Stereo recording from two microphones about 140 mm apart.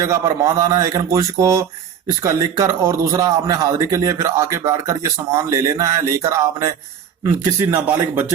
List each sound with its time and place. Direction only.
0.0 s a man's voice: 25° right (ahead or behind)